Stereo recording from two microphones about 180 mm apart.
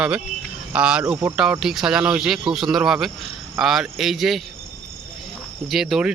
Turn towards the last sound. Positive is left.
turn(degrees=-5)  # may be behind; listen again after turning